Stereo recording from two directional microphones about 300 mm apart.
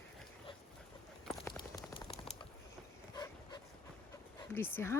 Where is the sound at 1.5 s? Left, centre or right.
Centre.